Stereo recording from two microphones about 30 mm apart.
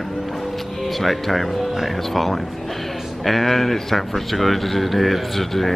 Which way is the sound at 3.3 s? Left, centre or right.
Centre.